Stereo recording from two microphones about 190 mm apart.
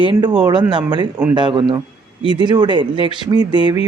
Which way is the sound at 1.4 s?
25° right (ahead or behind).